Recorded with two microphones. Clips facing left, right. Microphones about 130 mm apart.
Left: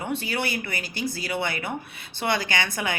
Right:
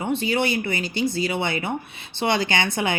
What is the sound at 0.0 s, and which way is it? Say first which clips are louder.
A woman's voice: right 5 dB; 20° right (ahead or behind).